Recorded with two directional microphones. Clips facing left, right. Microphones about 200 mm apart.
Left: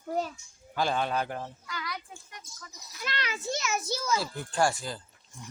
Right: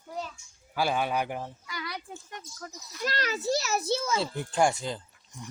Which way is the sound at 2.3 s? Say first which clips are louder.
Right 7 dB; 50° right (ahead or behind).